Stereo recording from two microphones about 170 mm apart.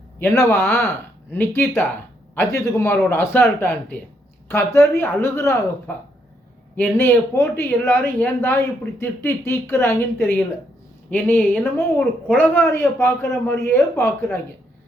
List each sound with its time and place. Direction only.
0.2 s speech: 15° left (ahead or behind)